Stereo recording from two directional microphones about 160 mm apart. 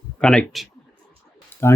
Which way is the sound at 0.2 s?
5° left (ahead or behind).